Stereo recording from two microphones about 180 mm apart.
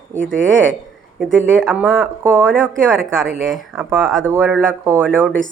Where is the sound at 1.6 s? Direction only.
5° right (ahead or behind).